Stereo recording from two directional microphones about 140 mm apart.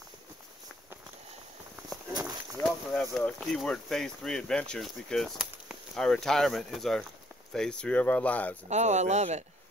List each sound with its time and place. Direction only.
2.6 s speech: 5° left (ahead or behind)
8.6 s speech: 55° right (ahead or behind)